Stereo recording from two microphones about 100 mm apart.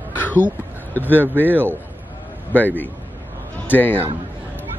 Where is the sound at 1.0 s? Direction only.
20° right (ahead or behind).